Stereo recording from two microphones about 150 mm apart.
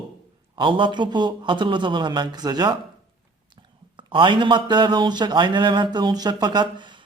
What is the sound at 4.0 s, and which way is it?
A man's voice, 35° right (ahead or behind).